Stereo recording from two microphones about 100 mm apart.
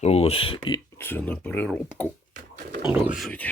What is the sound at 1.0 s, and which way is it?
Speech, 20° left (ahead or behind).